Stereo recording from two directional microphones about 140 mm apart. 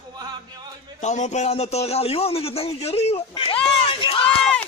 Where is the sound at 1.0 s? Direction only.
55° left (ahead or behind); by 3.6 s 40° left (ahead or behind).